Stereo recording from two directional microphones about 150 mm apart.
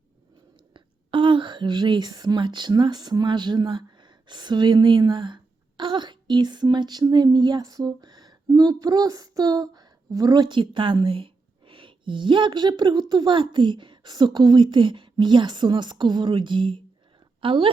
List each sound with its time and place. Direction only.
0.7 s a woman's voice: 35° right (ahead or behind)